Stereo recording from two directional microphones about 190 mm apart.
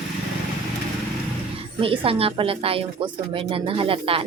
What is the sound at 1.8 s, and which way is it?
Speech, 30° right (ahead or behind).